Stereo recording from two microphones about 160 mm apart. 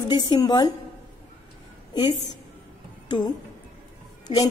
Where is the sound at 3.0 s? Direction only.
25° left (ahead or behind).